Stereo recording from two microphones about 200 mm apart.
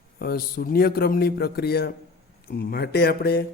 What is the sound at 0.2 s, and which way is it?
A man's voice, 50° left (ahead or behind).